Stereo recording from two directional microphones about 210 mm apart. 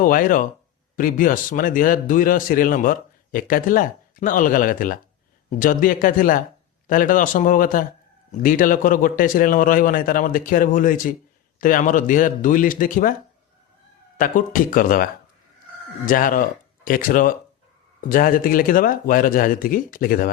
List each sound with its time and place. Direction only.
0.0 s a man's voice: 40° left (ahead or behind)
14.2 s a man's voice: 40° left (ahead or behind)